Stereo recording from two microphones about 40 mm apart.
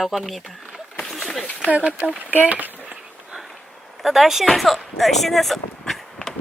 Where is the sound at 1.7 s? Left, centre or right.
Right.